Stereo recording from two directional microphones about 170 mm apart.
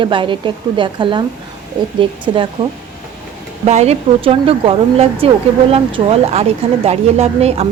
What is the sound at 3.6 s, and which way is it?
A woman's voice, 40° right (ahead or behind).